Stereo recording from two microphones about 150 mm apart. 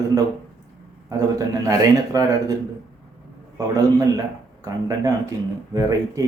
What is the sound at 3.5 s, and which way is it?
Speech, 20° right (ahead or behind).